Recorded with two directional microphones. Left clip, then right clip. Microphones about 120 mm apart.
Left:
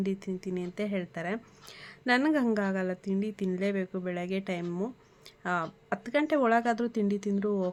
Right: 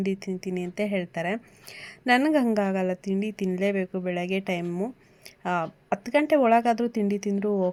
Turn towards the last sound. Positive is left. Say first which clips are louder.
# right 5 dB
turn(degrees=-25)  # may be behind; listen again after turning